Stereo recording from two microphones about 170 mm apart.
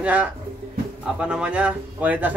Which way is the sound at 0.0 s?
10° right (ahead or behind).